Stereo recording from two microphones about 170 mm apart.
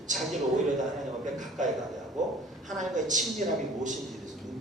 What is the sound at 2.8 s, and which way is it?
Speech, 45° right (ahead or behind).